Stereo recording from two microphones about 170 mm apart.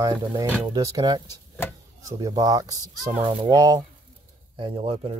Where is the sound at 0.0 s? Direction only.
20° right (ahead or behind).